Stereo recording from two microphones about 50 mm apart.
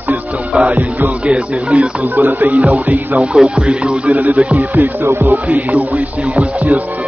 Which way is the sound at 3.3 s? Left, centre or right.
Centre.